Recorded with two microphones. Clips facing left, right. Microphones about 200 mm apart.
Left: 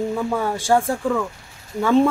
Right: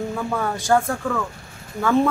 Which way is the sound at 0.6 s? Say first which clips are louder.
Even; 30° left (ahead or behind).